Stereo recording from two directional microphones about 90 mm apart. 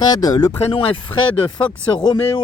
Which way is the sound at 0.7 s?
85° left.